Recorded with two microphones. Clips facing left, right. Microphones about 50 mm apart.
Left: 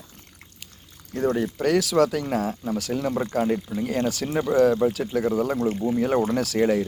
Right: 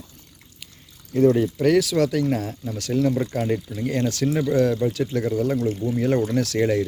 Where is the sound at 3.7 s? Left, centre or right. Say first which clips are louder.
Left 3 dB; left.